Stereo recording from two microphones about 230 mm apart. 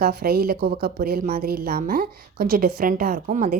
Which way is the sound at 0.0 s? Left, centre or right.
Right.